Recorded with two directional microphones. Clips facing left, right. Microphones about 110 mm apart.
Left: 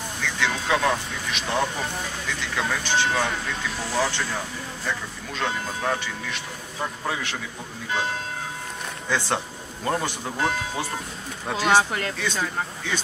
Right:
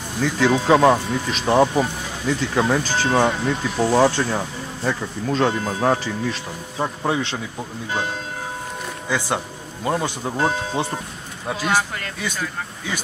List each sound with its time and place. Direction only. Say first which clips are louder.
0.2 s speech: right 9 dB; 35° right (ahead or behind)
3.7 s speech: right 12 dB; 60° right (ahead or behind)
4.0 s speech: right 8 dB; 30° right (ahead or behind)
6.8 s speech: right 6 dB; 25° right (ahead or behind)
9.8 s speech: right 3 dB; 15° right (ahead or behind)
10.3 s speech: right 5 dB; 30° right (ahead or behind)
11.5 s speech: left 2 dB; 20° left (ahead or behind)